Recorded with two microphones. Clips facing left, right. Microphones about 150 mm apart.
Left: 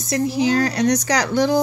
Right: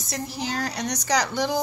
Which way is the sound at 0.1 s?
85° left.